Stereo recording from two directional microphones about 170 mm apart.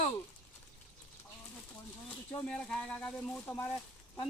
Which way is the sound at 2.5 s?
5° left (ahead or behind).